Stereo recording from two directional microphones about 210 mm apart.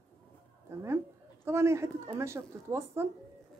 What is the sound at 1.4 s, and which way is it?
Speech, 10° right (ahead or behind).